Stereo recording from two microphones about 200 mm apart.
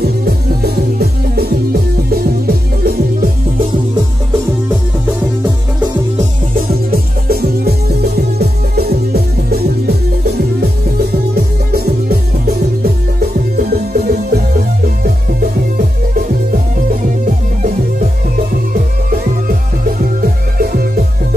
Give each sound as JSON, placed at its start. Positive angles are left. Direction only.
{"t": 0.0, "sound": "music", "side_deg": -50}
{"t": 6.5, "sound": "music", "side_deg": -50}
{"t": 17.6, "sound": "music", "side_deg": -40}
{"t": 20.0, "sound": "music", "side_deg": -45}